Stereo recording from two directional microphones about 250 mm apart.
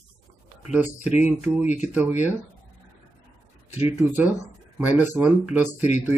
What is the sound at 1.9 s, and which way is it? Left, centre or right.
Speech, centre.